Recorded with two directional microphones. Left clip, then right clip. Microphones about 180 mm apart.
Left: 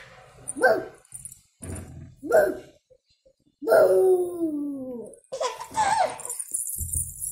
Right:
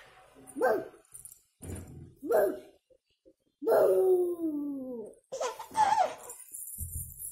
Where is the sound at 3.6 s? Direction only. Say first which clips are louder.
Left 7 dB; 20° right (ahead or behind).